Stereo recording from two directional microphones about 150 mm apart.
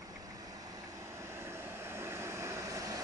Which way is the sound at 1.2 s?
15° right (ahead or behind).